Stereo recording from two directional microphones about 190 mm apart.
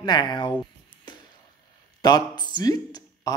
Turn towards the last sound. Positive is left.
turn(degrees=20)  # may be behind; listen again after turning